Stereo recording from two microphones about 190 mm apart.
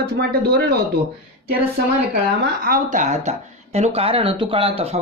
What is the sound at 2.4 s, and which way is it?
Speech, 50° right (ahead or behind).